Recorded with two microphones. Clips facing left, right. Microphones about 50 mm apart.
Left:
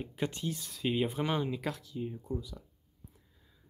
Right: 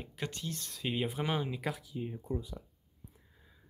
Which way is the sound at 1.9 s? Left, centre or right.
Centre.